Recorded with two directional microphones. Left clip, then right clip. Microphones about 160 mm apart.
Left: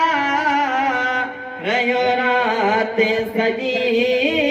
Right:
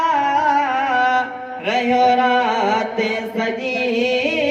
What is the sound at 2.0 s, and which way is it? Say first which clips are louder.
Carnatic music: right 2 dB; 25° left (ahead or behind).